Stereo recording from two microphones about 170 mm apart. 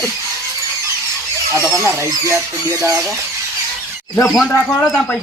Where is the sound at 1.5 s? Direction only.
15° right (ahead or behind).